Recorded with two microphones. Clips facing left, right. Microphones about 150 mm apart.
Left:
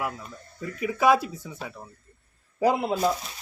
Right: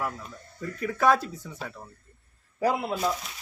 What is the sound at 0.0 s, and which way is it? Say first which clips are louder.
Speech: left 1 dB; 10° left (ahead or behind).